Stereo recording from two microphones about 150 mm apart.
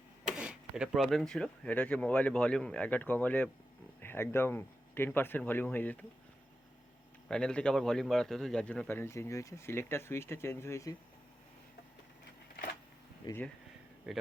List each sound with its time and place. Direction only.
0.3 s a man's voice: 5° right (ahead or behind); by 6.1 s 10° left (ahead or behind)
7.3 s a man's voice: 5° left (ahead or behind)
13.2 s speech: 30° left (ahead or behind)